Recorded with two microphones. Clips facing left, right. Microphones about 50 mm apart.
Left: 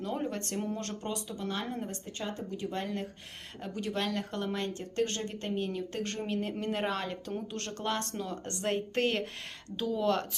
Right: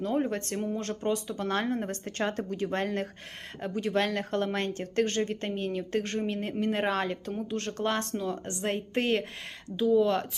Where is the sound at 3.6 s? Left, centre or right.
Right.